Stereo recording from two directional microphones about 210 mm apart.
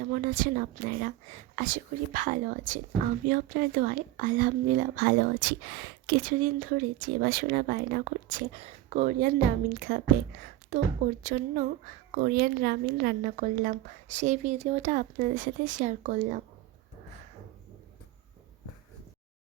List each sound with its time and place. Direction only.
0.0 s speech: 40° right (ahead or behind)
10.7 s speech: 35° right (ahead or behind)